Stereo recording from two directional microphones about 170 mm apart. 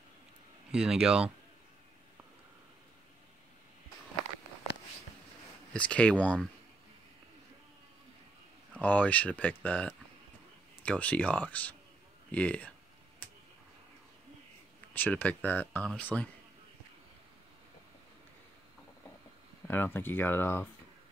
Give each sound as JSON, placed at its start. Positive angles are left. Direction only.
{"t": 0.7, "sound": "speech", "side_deg": -5}
{"t": 5.7, "sound": "speech", "side_deg": 5}
{"t": 8.8, "sound": "speech", "side_deg": 10}
{"t": 15.0, "sound": "speech", "side_deg": 10}
{"t": 19.7, "sound": "speech", "side_deg": 10}